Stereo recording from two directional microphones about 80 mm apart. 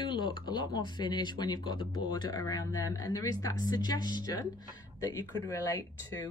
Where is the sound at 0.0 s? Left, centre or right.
Left.